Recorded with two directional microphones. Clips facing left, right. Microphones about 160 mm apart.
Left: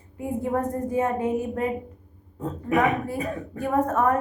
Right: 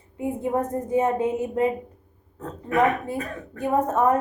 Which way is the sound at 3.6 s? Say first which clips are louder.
Right 1 dB; 20° right (ahead or behind).